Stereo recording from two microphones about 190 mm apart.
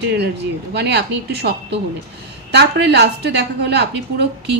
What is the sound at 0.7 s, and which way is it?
A woman's voice, 60° right (ahead or behind).